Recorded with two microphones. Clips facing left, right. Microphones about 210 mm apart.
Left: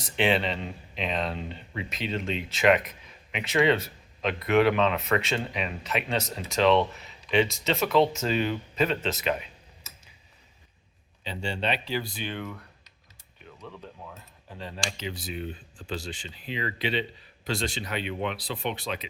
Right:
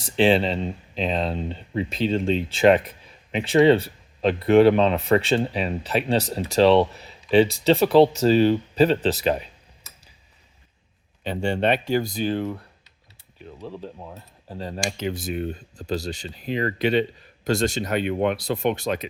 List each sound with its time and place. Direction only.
0.0 s speech: 30° right (ahead or behind)
11.2 s speech: 55° right (ahead or behind)